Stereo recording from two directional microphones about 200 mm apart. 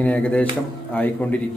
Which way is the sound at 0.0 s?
5° left (ahead or behind).